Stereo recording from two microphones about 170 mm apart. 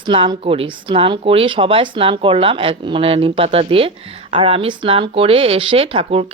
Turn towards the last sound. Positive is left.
turn(degrees=-35)  # may be behind; listen again after turning